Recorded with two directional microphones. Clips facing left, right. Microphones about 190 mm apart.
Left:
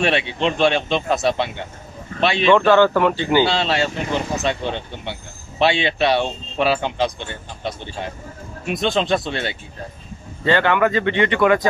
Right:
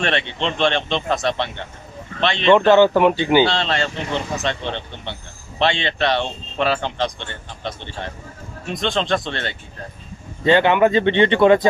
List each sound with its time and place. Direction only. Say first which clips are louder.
0.0 s a man's voice: left 3 dB; 10° left (ahead or behind)
2.5 s speech: right 2 dB; 20° right (ahead or behind)
3.4 s a man's voice: left 1 dB; 5° left (ahead or behind)
10.4 s speech: right 3 dB; 20° right (ahead or behind)